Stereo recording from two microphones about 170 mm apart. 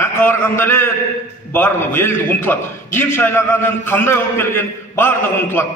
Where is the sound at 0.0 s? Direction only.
15° left (ahead or behind).